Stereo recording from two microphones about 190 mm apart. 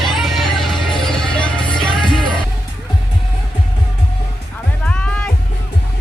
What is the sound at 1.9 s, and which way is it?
Music, 25° left (ahead or behind).